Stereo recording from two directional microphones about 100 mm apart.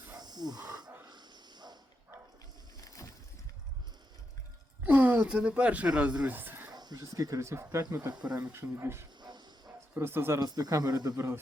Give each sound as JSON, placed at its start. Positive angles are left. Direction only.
{"t": 0.2, "sound": "a sound", "side_deg": -45}
{"t": 2.8, "sound": "boat", "side_deg": 30}
{"t": 4.8, "sound": "speech", "side_deg": -15}
{"t": 6.7, "sound": "speech", "side_deg": -45}
{"t": 8.4, "sound": "speech", "side_deg": -25}
{"t": 9.2, "sound": "bow-wow", "side_deg": -45}
{"t": 9.9, "sound": "speech", "side_deg": -25}
{"t": 10.4, "sound": "speech", "side_deg": -40}